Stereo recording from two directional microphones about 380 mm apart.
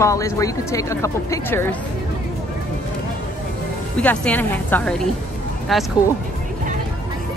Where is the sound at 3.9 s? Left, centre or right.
Centre.